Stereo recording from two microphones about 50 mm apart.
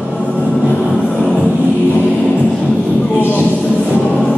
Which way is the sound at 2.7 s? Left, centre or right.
Left.